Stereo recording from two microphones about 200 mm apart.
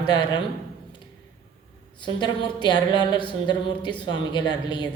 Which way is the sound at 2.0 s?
20° left (ahead or behind).